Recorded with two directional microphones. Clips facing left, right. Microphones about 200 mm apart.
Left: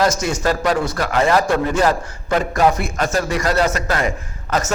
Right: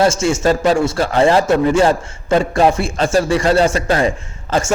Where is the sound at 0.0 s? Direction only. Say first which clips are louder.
Right 4 dB; 25° right (ahead or behind).